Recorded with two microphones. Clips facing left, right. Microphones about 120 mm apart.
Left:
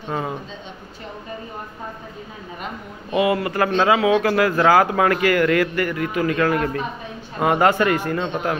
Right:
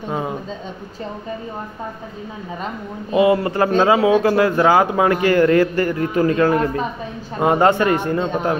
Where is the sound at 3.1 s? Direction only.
30° right (ahead or behind).